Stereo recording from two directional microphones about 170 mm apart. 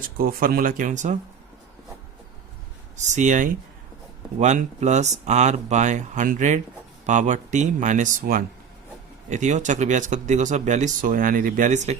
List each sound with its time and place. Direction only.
0.0 s speech: 55° right (ahead or behind)
2.9 s speech: 45° right (ahead or behind)